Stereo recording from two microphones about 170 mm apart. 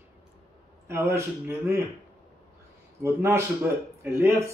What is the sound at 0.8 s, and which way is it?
Speech, 15° right (ahead or behind).